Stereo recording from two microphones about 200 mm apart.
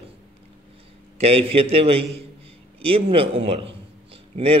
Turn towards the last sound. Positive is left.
turn(degrees=-30)  # may be behind; listen again after turning